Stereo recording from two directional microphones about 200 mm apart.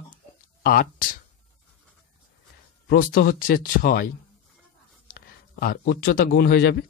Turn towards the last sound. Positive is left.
turn(degrees=50)  # may be behind; listen again after turning